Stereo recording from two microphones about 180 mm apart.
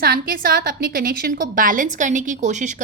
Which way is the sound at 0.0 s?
55° right (ahead or behind).